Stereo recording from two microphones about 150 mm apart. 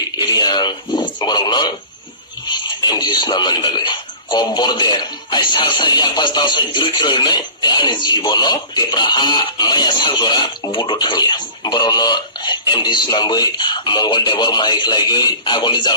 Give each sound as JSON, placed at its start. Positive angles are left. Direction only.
{"t": 0.2, "sound": "a man's voice", "side_deg": 30}